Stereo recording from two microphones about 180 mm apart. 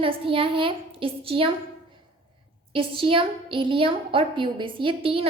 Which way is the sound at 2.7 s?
30° right (ahead or behind).